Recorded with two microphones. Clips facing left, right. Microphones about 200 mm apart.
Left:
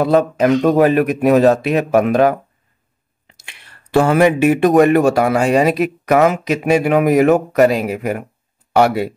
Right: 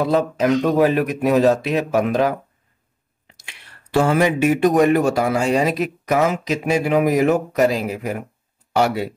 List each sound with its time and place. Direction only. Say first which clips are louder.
0.0 s speech: left 4 dB; 60° left (ahead or behind)
3.3 s speech: left 1 dB; 60° left (ahead or behind)